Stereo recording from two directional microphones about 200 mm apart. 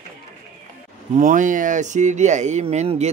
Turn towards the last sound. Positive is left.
turn(degrees=-35)  # may be behind; listen again after turning